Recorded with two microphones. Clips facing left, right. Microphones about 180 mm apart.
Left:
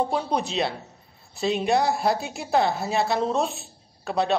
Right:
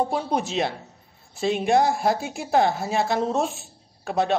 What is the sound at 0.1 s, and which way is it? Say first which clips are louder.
Speech: right 1 dB; 50° right (ahead or behind).